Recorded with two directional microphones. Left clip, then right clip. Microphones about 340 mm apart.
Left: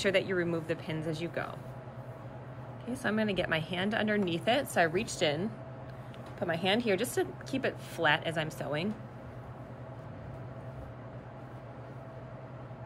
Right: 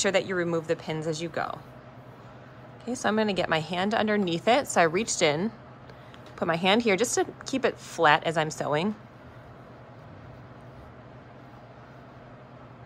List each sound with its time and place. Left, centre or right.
0.0 s a woman's voice: centre
2.8 s a woman's voice: centre